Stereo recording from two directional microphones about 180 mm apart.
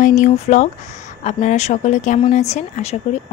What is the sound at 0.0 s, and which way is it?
A woman's voice, 45° left (ahead or behind).